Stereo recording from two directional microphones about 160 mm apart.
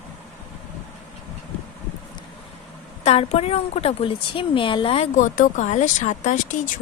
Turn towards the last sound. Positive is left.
turn(degrees=50)  # may be behind; listen again after turning